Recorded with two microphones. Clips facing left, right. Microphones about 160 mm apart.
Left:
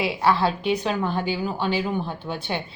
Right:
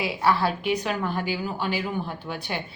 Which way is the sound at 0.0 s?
25° left (ahead or behind).